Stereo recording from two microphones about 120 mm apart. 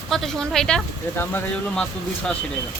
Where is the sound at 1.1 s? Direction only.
15° left (ahead or behind).